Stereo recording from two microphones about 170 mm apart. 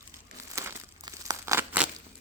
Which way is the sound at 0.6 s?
20° right (ahead or behind).